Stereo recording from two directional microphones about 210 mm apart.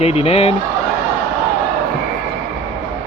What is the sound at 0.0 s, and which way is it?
Speech, 30° left (ahead or behind).